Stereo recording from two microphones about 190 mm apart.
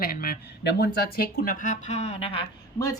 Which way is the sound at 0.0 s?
50° left (ahead or behind).